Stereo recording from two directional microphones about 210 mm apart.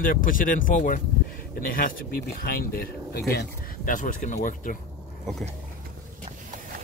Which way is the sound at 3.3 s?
45° left (ahead or behind).